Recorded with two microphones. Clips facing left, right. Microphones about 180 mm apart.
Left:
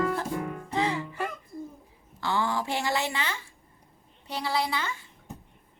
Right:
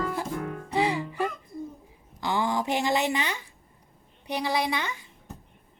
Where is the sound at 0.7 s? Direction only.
15° right (ahead or behind).